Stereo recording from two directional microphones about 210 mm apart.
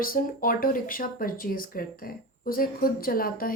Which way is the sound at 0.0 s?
45° left (ahead or behind).